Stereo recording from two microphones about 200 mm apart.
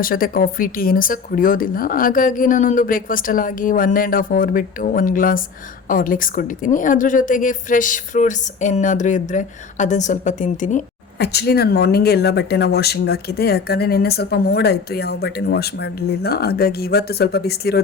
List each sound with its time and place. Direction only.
0.0 s a woman's voice: 45° left (ahead or behind)
11.2 s speech: 55° left (ahead or behind)